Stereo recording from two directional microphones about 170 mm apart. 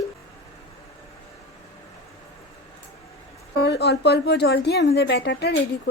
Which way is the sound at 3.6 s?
75° left (ahead or behind).